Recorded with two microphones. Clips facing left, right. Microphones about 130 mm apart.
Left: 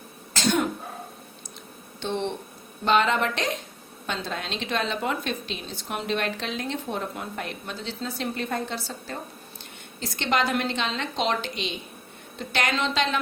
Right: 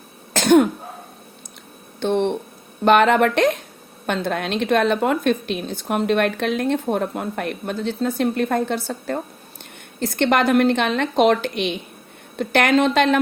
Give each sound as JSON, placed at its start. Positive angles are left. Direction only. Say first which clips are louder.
{"t": 0.3, "sound": "cough", "louder": "right 10 dB", "side_deg": -55}
{"t": 2.0, "sound": "speech", "louder": "right 9 dB", "side_deg": -55}